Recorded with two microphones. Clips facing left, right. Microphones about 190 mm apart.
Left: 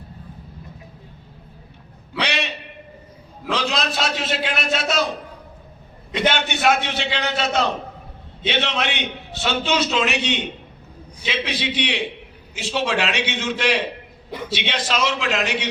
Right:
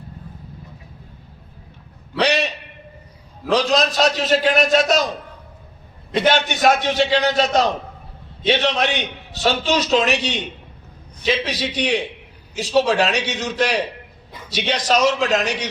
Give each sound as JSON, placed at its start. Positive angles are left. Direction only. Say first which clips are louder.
{"t": 2.1, "sound": "a man's voice", "louder": "right 6 dB", "side_deg": -40}
{"t": 6.2, "sound": "a man's voice", "louder": "right 3 dB", "side_deg": -40}